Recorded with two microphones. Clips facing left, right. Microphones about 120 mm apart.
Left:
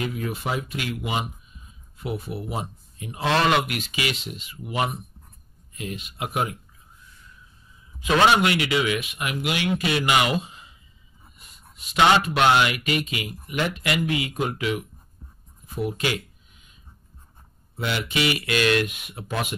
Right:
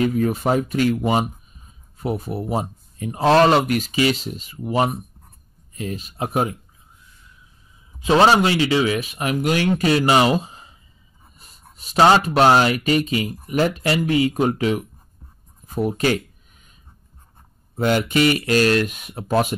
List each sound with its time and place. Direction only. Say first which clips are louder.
0.0 s speech: right 9 dB; 40° right (ahead or behind)
8.0 s speech: right 4 dB; 35° right (ahead or behind)
15.6 s a sound: right 6 dB; 40° right (ahead or behind)
17.7 s speech: right 8 dB; 45° right (ahead or behind)